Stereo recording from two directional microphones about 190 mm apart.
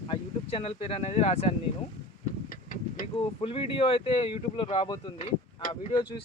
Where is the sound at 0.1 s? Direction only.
30° left (ahead or behind).